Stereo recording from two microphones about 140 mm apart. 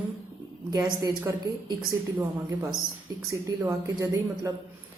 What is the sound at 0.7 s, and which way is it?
A woman's voice, 25° right (ahead or behind).